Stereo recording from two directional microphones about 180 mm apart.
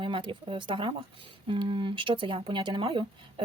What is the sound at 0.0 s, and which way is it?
A woman's voice, 30° right (ahead or behind).